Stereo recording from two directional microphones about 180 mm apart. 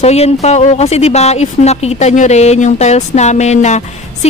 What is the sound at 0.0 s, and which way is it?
Speech, 35° left (ahead or behind).